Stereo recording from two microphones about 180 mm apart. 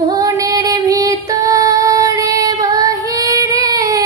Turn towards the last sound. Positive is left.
turn(degrees=-20)  # may be behind; listen again after turning